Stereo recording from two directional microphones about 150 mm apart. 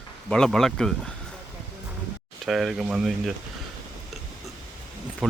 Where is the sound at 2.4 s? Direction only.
Centre (ahead or behind).